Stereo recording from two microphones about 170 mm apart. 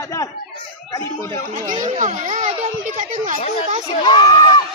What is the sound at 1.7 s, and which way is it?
Speech, 45° right (ahead or behind).